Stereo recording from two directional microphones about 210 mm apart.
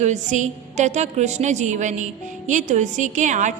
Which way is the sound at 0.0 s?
35° right (ahead or behind).